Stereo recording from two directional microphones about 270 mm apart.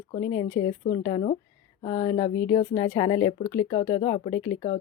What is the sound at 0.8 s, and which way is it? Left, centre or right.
Speech, centre.